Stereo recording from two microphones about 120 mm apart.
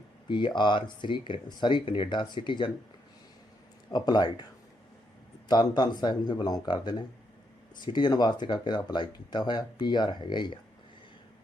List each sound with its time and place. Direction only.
0.3 s speech: 40° left (ahead or behind)
3.9 s speech: 35° left (ahead or behind)
5.5 s speech: 35° left (ahead or behind)